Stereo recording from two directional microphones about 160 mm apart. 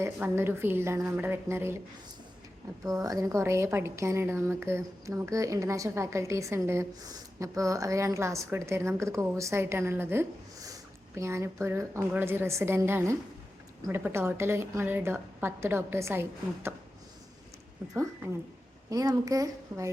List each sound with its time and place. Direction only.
0.0 s a woman's voice: 15° right (ahead or behind)
2.8 s a woman's voice: 20° right (ahead or behind)
18.9 s speech: 20° right (ahead or behind)